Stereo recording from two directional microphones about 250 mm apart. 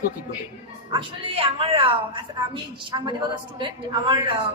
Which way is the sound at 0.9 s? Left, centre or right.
Right.